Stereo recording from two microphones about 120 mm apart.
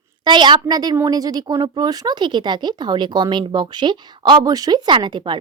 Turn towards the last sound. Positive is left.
turn(degrees=-40)  # may be behind; listen again after turning